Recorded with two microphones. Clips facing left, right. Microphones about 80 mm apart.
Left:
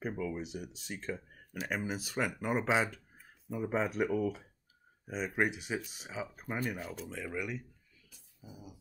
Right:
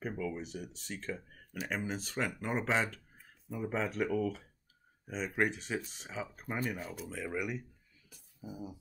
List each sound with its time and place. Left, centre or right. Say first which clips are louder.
0.0 s speech: left 1 dB; centre
8.4 s speech: right 7 dB; right